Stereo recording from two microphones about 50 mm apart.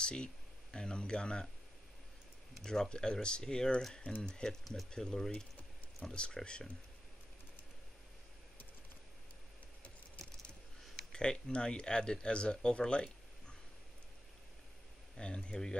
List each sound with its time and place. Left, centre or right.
0.0 s speech: centre
2.6 s speech: centre
11.1 s speech: centre
15.1 s speech: centre